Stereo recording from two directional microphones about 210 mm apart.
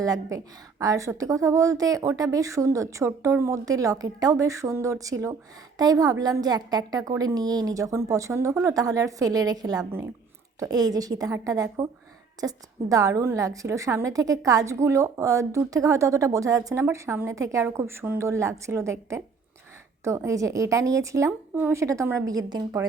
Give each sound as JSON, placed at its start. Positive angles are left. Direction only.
{"t": 0.0, "sound": "a woman's voice", "side_deg": -15}